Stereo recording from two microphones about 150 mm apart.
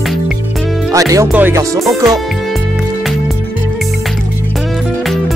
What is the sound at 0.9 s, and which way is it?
Speech, 20° right (ahead or behind).